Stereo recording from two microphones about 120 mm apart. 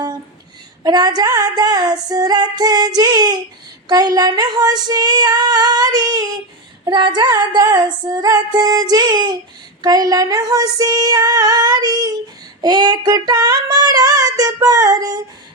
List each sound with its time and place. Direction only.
0.9 s female singing: 35° right (ahead or behind)